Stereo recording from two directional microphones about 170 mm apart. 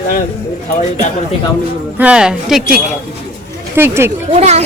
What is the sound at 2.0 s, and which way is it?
Speech, 5° right (ahead or behind).